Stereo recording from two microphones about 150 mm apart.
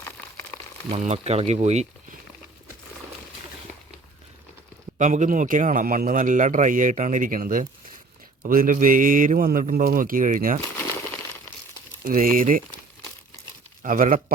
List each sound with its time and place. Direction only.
0.9 s speech: 45° right (ahead or behind)
4.9 s a man's voice: 55° right (ahead or behind)
12.0 s speech: 65° right (ahead or behind)
13.8 s speech: 65° right (ahead or behind)